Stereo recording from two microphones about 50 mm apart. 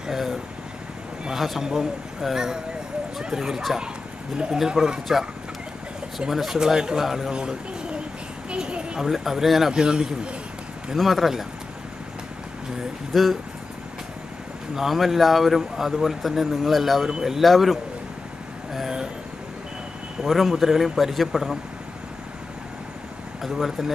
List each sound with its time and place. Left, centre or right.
0.1 s a man's voice: centre
9.8 s a man's voice: centre
11.0 s speech: centre
13.1 s speech: centre
14.8 s speech: centre
18.7 s vehicle: centre
20.2 s speech: centre
23.4 s speech: centre